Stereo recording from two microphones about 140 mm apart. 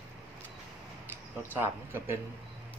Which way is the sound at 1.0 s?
15° right (ahead or behind).